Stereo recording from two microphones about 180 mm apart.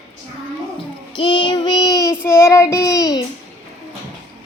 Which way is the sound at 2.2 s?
15° left (ahead or behind).